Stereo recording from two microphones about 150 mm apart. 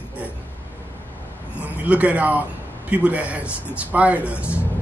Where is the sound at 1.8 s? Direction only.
10° right (ahead or behind).